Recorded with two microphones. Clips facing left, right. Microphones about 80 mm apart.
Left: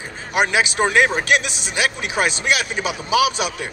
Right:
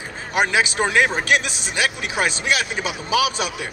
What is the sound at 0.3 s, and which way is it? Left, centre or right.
A man's voice, left.